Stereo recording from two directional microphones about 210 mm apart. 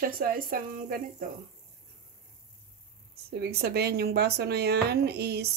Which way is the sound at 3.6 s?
50° right (ahead or behind).